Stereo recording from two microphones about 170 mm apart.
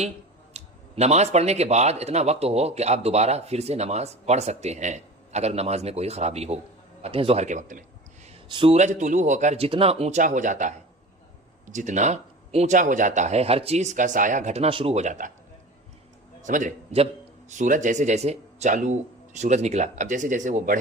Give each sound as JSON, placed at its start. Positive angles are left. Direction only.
{"t": 0.5, "sound": "speech", "side_deg": -40}
{"t": 8.4, "sound": "speech", "side_deg": -30}
{"t": 16.4, "sound": "speech", "side_deg": -50}